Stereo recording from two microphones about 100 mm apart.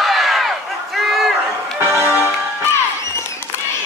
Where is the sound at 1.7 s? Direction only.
20° right (ahead or behind).